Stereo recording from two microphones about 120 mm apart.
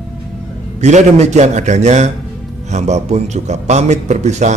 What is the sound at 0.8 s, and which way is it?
Speech, 70° right (ahead or behind).